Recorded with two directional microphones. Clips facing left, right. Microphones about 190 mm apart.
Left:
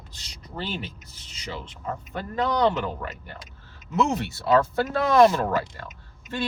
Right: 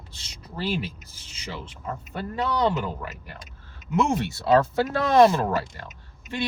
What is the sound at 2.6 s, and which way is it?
Speech, 10° right (ahead or behind).